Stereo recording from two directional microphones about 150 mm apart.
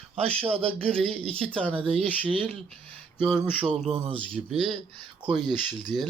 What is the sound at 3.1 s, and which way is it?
Speech, 5° right (ahead or behind).